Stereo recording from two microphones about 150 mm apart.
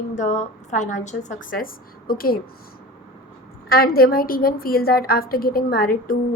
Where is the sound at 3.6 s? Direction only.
90° left.